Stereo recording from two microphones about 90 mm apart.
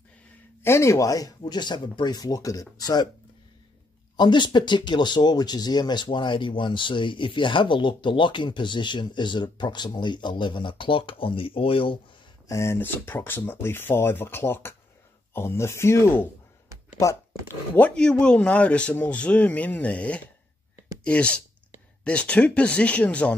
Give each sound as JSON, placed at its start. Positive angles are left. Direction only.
{"t": 0.6, "sound": "speech", "side_deg": 30}
{"t": 4.2, "sound": "speech", "side_deg": 55}
{"t": 12.4, "sound": "speech", "side_deg": 35}
{"t": 12.7, "sound": "speech", "side_deg": 25}
{"t": 17.7, "sound": "speech", "side_deg": 10}